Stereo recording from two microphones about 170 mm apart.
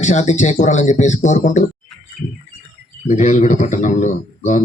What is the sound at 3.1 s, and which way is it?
Speech, 45° left (ahead or behind).